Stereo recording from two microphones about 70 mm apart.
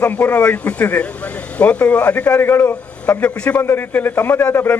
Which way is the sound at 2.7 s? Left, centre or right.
Centre.